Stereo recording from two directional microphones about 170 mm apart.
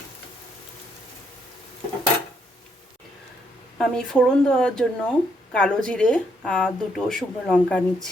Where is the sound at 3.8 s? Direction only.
5° left (ahead or behind).